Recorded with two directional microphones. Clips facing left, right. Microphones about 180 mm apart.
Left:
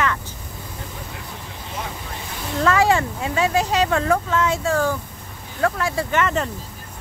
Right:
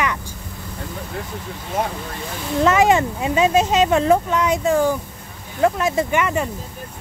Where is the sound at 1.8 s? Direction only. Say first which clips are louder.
Right 9 dB; 50° right (ahead or behind).